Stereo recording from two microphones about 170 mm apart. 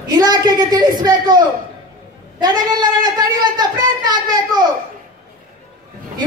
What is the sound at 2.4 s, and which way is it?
Speech, 25° right (ahead or behind).